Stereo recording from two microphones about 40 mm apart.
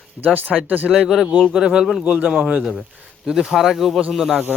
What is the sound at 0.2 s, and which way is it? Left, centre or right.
Speech, centre.